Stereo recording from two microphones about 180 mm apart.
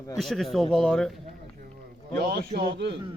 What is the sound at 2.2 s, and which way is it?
Speech, 60° right (ahead or behind).